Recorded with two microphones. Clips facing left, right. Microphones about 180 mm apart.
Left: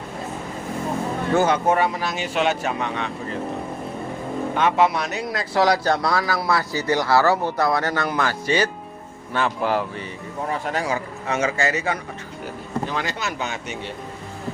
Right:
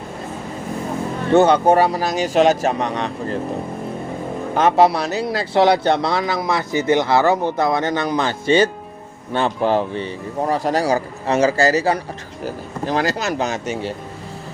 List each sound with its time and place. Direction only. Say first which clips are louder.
1.3 s speech: right 6 dB; 30° right (ahead or behind)
4.5 s speech: right 5 dB; 40° right (ahead or behind)
10.4 s speech: right 7 dB; 35° right (ahead or behind)